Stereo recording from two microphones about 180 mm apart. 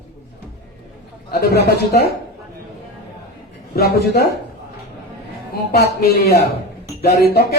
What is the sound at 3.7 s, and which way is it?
Speech, 60° left (ahead or behind).